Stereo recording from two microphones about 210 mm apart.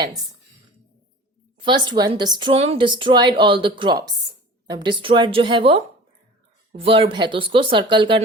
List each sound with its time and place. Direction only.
1.5 s a woman's voice: 20° right (ahead or behind)